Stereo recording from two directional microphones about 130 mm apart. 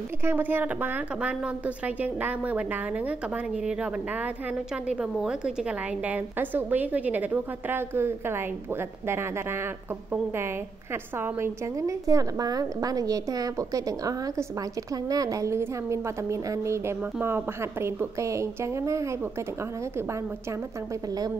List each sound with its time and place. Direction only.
0.2 s a woman's voice: 15° right (ahead or behind)
11.1 s a woman's voice: 20° right (ahead or behind)